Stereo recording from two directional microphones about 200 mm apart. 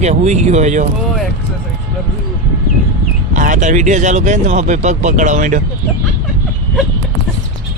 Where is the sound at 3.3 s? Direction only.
40° right (ahead or behind).